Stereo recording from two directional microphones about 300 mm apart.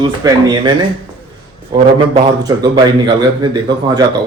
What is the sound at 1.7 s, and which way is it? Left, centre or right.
A man's voice, centre.